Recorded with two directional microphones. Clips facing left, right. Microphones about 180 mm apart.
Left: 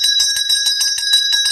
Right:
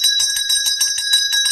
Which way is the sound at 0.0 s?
35° left (ahead or behind).